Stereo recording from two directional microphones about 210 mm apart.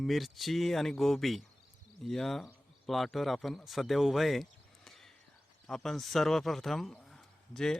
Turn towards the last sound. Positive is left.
turn(degrees=0)  # may be behind; listen again after turning